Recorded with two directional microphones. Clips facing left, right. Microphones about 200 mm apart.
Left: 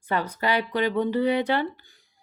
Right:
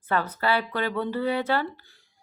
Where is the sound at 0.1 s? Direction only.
15° left (ahead or behind).